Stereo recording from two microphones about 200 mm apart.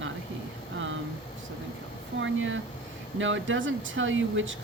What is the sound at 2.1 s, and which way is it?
Speech, 70° right (ahead or behind).